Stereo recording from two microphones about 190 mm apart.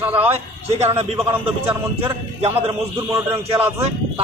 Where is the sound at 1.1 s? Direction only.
10° right (ahead or behind).